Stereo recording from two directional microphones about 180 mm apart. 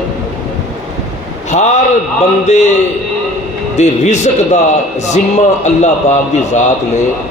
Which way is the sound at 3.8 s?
40° left (ahead or behind).